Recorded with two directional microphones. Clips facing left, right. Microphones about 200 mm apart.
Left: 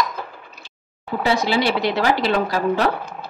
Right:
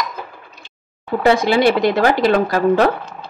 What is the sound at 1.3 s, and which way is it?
A woman's voice, 50° right (ahead or behind).